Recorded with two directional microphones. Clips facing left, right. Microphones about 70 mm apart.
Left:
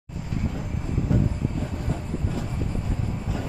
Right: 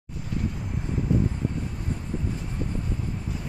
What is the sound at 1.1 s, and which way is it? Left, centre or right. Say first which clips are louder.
Vehicle: even; left.